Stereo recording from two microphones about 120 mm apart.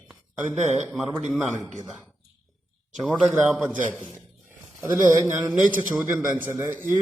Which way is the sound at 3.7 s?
10° left (ahead or behind).